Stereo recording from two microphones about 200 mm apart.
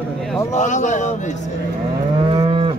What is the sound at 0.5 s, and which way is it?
Speech, 35° left (ahead or behind).